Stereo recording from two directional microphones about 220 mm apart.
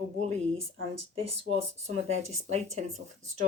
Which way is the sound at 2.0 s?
30° right (ahead or behind).